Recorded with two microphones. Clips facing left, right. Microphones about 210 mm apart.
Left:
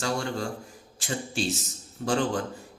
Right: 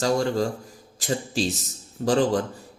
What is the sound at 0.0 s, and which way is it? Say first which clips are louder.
A man's voice: right 7 dB; 40° right (ahead or behind).